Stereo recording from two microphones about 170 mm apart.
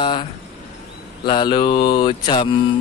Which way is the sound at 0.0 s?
30° left (ahead or behind).